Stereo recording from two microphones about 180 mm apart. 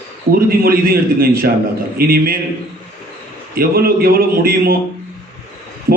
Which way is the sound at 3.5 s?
55° right (ahead or behind).